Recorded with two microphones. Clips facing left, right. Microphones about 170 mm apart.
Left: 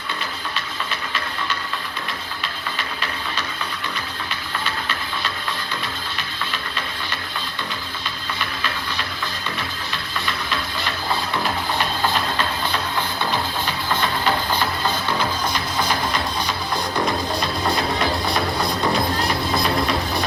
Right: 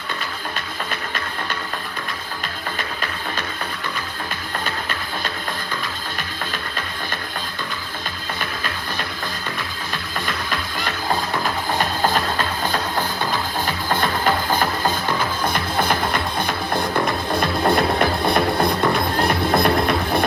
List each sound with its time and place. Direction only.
0.5 s music: 50° right (ahead or behind)
10.2 s music: 45° right (ahead or behind)